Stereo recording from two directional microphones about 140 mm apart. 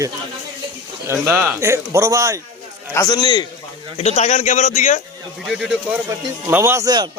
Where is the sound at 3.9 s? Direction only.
50° left (ahead or behind).